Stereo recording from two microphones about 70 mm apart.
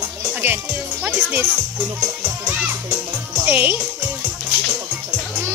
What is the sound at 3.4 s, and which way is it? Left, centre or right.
Speech, right.